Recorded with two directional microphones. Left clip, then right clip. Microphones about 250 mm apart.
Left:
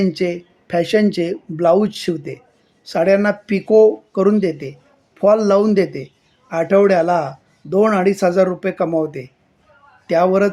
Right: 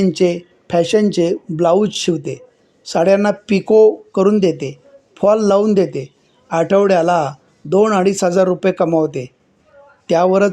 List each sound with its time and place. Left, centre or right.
0.0 s a man's voice: centre